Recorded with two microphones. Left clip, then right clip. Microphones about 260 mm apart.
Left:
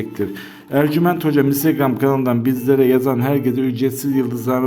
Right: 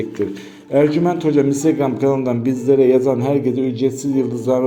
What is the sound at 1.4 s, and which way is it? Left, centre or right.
A man's voice, left.